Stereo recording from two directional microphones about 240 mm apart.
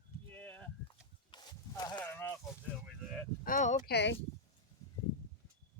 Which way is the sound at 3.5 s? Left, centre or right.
Left.